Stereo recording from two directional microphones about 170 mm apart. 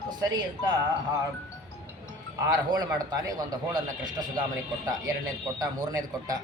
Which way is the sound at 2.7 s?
25° right (ahead or behind).